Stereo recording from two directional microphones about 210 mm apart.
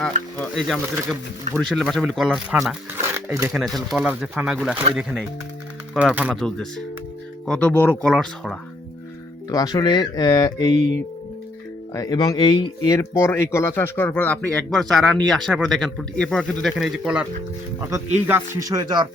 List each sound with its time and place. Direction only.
0.0 s speech: centre (ahead or behind)
9.5 s speech: 20° left (ahead or behind)
11.9 s speech: 20° left (ahead or behind); by 17.2 s 5° right (ahead or behind)
18.3 s speech: 15° right (ahead or behind)